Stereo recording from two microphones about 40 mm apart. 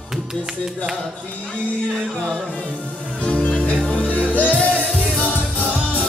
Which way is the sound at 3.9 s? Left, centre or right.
Left.